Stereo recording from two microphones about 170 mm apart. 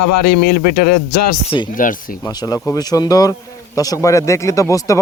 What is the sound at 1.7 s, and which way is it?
Speech, 55° left (ahead or behind).